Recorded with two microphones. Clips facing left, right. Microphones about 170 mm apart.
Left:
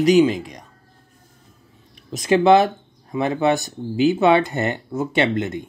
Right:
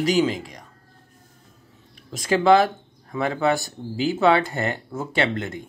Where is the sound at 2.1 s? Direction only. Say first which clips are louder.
Left 3 dB; 20° left (ahead or behind).